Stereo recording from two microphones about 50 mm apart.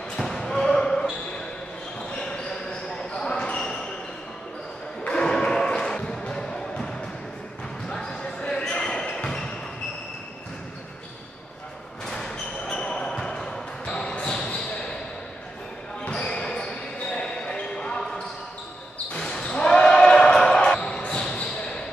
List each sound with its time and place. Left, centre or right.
0.2 s basketball bounce: centre
2.0 s basketball bounce: centre
5.0 s a sound: centre
7.9 s basketball bounce: centre
12.1 s a sound: centre
12.7 s basketball bounce: centre
16.1 s basketball bounce: centre